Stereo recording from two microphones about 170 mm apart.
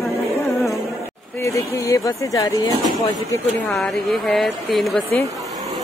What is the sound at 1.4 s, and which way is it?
Speech, 20° left (ahead or behind).